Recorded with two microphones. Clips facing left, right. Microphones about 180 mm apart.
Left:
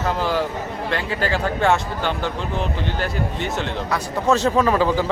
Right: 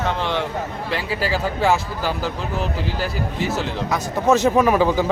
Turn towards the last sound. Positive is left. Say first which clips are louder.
# right 1 dB
turn(degrees=-15)  # may be behind; listen again after turning